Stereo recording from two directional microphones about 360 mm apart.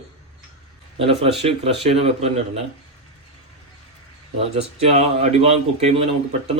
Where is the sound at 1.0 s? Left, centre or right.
Centre.